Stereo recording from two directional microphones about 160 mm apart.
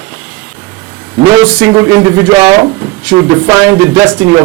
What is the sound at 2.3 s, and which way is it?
Speech, 30° right (ahead or behind).